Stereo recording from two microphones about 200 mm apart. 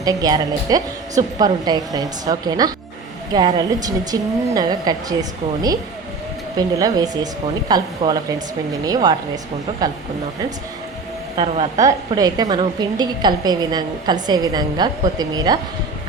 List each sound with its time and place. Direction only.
0.0 s a woman's voice: 20° right (ahead or behind)
6.6 s a woman's voice: 20° right (ahead or behind)
11.3 s a woman's voice: 30° right (ahead or behind)
11.8 s a woman's voice: 15° right (ahead or behind)